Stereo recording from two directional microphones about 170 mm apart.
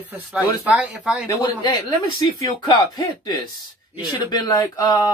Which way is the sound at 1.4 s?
25° left (ahead or behind).